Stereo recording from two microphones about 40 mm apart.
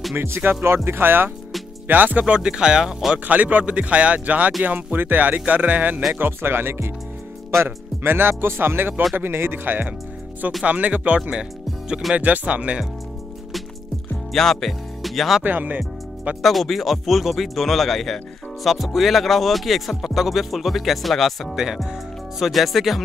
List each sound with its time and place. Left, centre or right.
0.1 s music: right
0.8 s speech: right
1.9 s speech: right
2.2 s speech: right
3.3 s a man's voice: right
4.9 s speech: right
6.1 s speech: right
9.5 s speech: right
10.6 s a man's voice: right
11.1 s speech: right
12.2 s a man's voice: right
14.3 s speech: centre
15.4 s speech: right
16.4 s speech: centre